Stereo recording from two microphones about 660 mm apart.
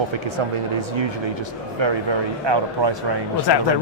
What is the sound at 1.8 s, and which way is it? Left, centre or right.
A man's voice, right.